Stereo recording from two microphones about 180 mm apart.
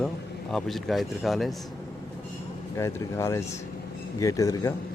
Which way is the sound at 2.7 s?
15° left (ahead or behind).